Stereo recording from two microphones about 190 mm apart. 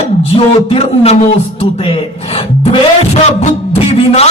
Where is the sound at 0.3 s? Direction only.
30° left (ahead or behind).